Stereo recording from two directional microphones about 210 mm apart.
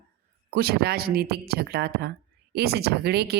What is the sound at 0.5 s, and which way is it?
Speech, 45° right (ahead or behind).